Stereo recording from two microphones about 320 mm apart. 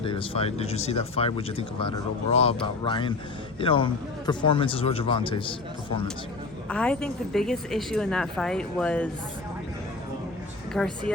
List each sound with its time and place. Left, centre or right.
0.0 s speech: centre
6.7 s speech: centre
10.8 s speech: centre